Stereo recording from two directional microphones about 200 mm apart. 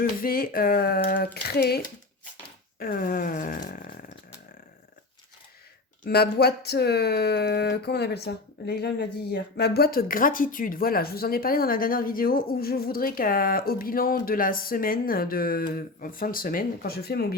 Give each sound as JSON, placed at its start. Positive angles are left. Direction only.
{"t": 0.0, "sound": "speech", "side_deg": 45}
{"t": 2.7, "sound": "a sound", "side_deg": 45}
{"t": 6.0, "sound": "speech", "side_deg": 55}